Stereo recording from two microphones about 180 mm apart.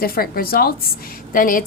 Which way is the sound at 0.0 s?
55° left (ahead or behind).